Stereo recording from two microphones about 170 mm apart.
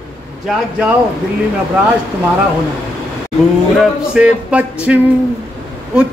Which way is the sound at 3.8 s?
5° right (ahead or behind).